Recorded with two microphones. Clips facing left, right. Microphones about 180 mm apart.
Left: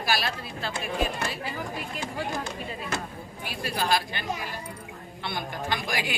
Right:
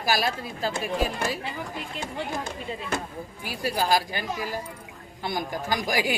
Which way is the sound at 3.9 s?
40° right (ahead or behind).